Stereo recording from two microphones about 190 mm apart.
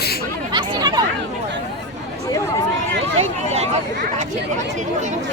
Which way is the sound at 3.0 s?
35° right (ahead or behind).